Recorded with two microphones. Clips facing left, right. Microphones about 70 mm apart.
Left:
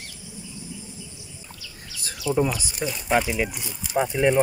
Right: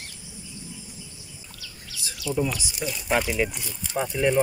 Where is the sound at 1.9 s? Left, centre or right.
Left.